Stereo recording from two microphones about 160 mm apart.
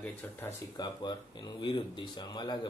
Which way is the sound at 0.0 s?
10° left (ahead or behind).